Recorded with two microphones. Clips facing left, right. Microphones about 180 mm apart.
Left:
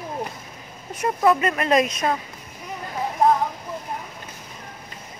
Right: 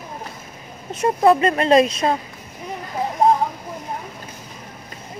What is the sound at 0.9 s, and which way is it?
Speech, 30° right (ahead or behind).